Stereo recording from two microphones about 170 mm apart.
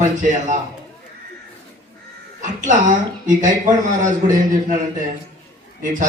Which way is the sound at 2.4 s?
50° right (ahead or behind).